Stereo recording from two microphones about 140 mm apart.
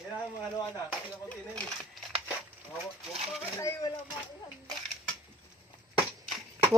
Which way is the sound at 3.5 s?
25° left (ahead or behind).